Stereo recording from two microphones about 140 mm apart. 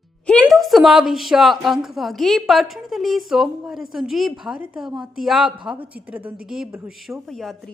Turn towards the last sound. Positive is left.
turn(degrees=0)  # may be behind; listen again after turning